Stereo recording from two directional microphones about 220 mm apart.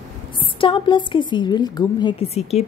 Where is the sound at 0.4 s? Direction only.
25° left (ahead or behind).